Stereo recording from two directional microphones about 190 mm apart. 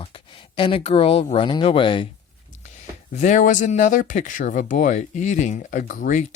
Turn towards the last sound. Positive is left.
turn(degrees=45)  # may be behind; listen again after turning